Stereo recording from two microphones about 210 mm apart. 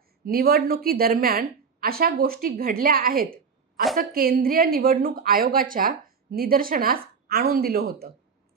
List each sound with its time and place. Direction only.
0.3 s a woman's voice: 45° right (ahead or behind)